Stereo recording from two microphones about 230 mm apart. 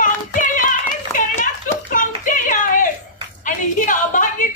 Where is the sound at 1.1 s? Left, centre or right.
Left.